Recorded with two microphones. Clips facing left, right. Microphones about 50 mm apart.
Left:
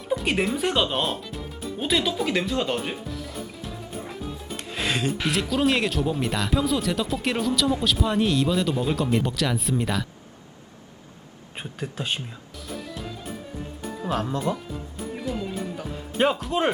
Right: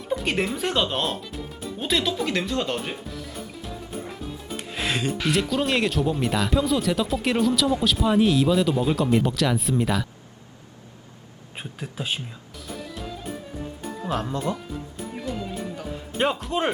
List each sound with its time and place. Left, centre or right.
0.1 s speech: centre
11.5 s speech: centre
12.6 s music: centre